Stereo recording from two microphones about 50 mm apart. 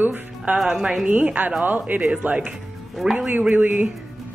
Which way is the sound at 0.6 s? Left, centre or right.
Centre.